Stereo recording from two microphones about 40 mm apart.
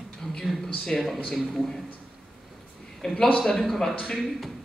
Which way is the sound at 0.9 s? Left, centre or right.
Centre.